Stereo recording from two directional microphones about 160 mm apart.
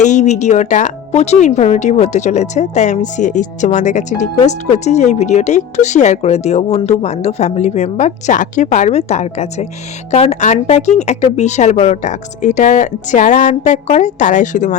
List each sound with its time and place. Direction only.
0.0 s speech: 45° left (ahead or behind)